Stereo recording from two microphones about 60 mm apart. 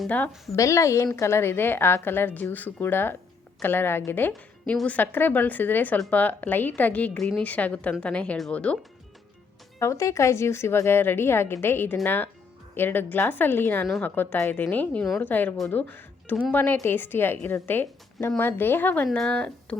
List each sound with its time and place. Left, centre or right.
0.5 s a woman's voice: left
7.2 s a woman's voice: centre
7.4 s a woman's voice: left
9.8 s a woman's voice: left
15.8 s music: left
16.4 s a woman's voice: left